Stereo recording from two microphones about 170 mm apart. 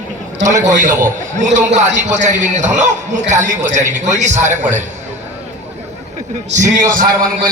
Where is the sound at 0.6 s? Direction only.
50° right (ahead or behind).